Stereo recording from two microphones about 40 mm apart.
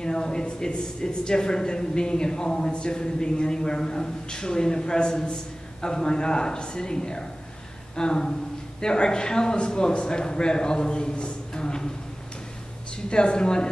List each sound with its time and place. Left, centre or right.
0.0 s speech: centre
13.1 s speech: left